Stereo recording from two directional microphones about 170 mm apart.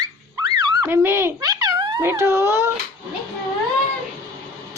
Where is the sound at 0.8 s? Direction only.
15° right (ahead or behind).